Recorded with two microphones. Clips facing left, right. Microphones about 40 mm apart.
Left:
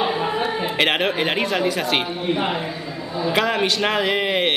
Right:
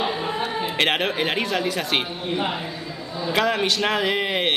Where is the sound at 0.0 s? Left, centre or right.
Centre.